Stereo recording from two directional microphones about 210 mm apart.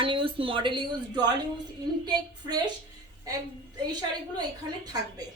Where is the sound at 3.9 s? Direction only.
20° right (ahead or behind).